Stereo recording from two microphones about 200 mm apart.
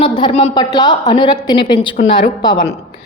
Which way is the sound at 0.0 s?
25° left (ahead or behind).